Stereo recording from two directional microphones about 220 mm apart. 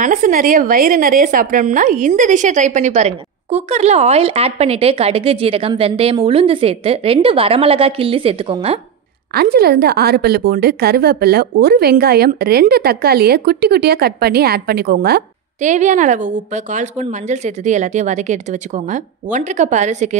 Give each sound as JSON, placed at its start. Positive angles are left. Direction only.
{"t": 0.0, "sound": "a woman's voice", "side_deg": -35}
{"t": 9.3, "sound": "a woman's voice", "side_deg": -45}